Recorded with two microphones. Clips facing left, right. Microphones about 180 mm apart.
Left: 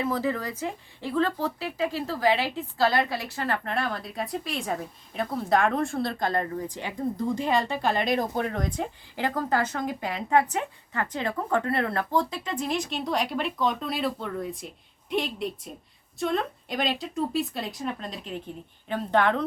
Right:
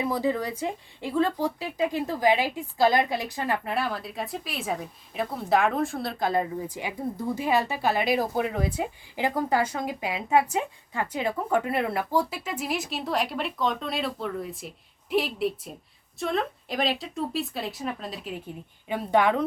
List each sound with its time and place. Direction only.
0.0 s a woman's voice: 15° right (ahead or behind)